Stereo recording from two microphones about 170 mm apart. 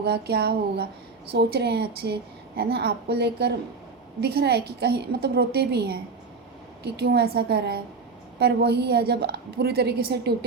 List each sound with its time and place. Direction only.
0.0 s a woman's voice: 70° right (ahead or behind)